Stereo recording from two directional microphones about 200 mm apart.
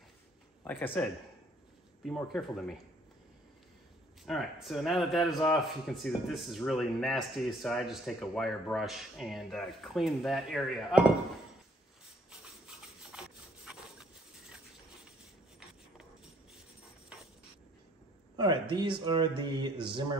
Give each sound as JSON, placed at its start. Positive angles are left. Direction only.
{"t": 0.7, "sound": "a man's voice", "side_deg": 10}
{"t": 4.3, "sound": "speech", "side_deg": 0}
{"t": 12.3, "sound": "rub", "side_deg": -5}
{"t": 13.7, "sound": "a sound", "side_deg": -5}
{"t": 18.3, "sound": "speech", "side_deg": -20}